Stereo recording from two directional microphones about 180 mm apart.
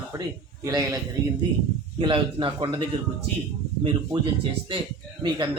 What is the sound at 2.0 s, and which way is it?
Speech, 30° right (ahead or behind).